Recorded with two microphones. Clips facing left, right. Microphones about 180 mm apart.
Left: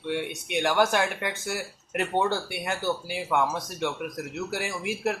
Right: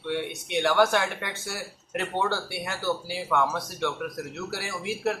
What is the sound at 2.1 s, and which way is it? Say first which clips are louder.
Speech: left 2 dB; 15° left (ahead or behind).